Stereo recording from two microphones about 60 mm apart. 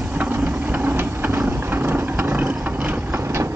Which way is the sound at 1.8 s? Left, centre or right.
Right.